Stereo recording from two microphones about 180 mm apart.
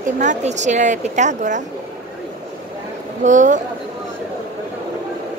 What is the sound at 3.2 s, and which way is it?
Speech, 45° right (ahead or behind).